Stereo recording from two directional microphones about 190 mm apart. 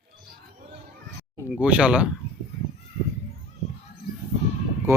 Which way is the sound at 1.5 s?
5° right (ahead or behind).